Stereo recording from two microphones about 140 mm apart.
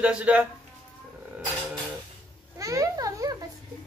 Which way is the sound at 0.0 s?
10° right (ahead or behind).